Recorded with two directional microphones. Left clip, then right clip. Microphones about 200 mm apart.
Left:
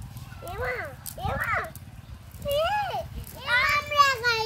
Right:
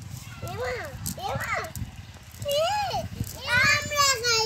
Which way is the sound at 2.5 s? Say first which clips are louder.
Right 1 dB; 10° right (ahead or behind).